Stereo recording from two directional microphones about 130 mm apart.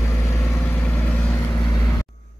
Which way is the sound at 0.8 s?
10° left (ahead or behind).